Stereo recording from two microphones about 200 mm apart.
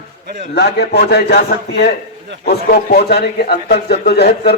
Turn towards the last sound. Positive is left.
turn(degrees=55)  # may be behind; listen again after turning